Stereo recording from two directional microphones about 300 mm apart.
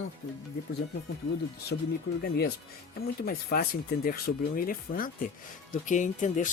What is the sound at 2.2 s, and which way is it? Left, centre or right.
Speech, left.